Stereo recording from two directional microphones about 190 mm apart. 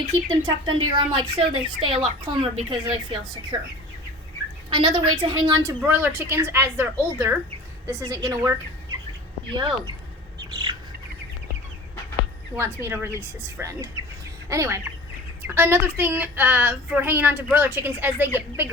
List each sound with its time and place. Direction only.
0.3 s speech: 25° right (ahead or behind)
4.7 s a child's voice: 25° right (ahead or behind)
9.6 s speech: 25° right (ahead or behind)
12.8 s a child's voice: 15° right (ahead or behind)